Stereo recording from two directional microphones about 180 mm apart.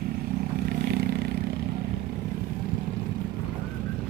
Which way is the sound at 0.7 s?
60° right (ahead or behind).